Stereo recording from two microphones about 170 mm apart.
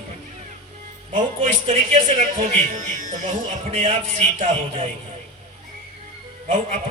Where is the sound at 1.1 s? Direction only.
45° right (ahead or behind).